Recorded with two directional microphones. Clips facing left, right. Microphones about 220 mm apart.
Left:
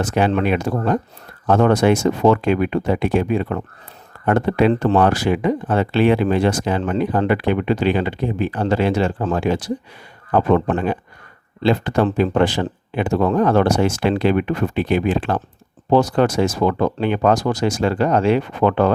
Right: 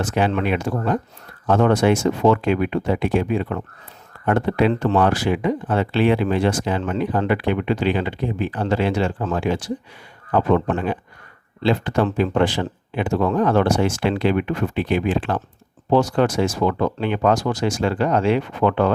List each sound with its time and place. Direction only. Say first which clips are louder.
0.0 s speech: left 3 dB; 40° left (ahead or behind)